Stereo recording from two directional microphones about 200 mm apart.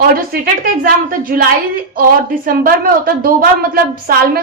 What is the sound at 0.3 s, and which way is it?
A woman's voice, 50° right (ahead or behind).